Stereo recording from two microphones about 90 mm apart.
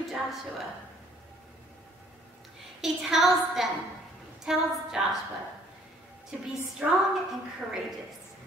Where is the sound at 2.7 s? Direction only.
5° right (ahead or behind).